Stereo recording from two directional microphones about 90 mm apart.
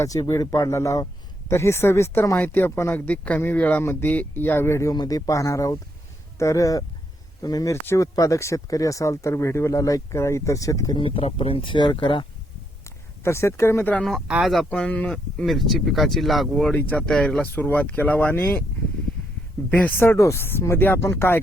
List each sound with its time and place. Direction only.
0.0 s speech: 40° left (ahead or behind)
4.9 s speech: 45° left (ahead or behind)
10.9 s speech: 80° left
12.8 s a sound: 30° left (ahead or behind)
14.0 s speech: centre (ahead or behind)
14.8 s speech: 15° left (ahead or behind)
15.4 s speech: centre (ahead or behind)
16.7 s speech: 20° left (ahead or behind)
17.0 s speech: 10° left (ahead or behind)
19.2 s a sound: 10° left (ahead or behind)
19.7 s speech: 20° left (ahead or behind)